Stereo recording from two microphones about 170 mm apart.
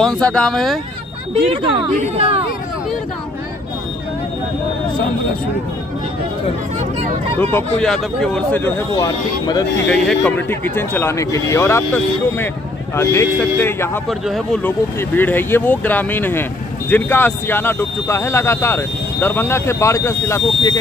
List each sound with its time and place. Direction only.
0.0 s speech: 5° left (ahead or behind)
1.5 s speech: 35° right (ahead or behind)
7.5 s speech: 5° left (ahead or behind); by 9.7 s 20° left (ahead or behind)
9.8 s speech: 5° left (ahead or behind)
14.0 s speech: centre (ahead or behind)
14.6 s speech: 10° left (ahead or behind)